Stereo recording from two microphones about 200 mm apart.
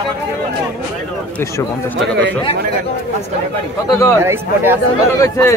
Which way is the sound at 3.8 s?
15° left (ahead or behind).